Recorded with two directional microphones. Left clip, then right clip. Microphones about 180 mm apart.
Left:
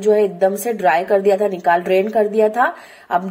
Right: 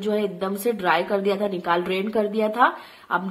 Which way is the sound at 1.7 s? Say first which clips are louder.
Left 9 dB; 15° left (ahead or behind).